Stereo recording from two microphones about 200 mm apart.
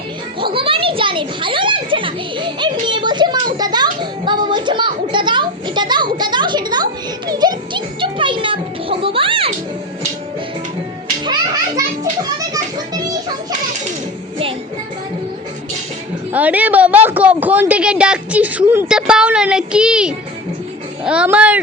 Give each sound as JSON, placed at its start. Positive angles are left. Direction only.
{"t": 0.5, "sound": "children playing", "side_deg": -25}
{"t": 4.3, "sound": "a sound", "side_deg": -20}
{"t": 7.3, "sound": "music", "side_deg": -20}
{"t": 16.3, "sound": "a woman's voice", "side_deg": -5}